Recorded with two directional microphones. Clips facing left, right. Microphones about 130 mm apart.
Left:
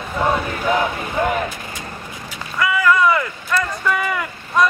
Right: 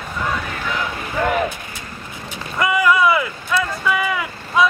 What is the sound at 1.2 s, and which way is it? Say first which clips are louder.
Vehicle: even; 20° left (ahead or behind).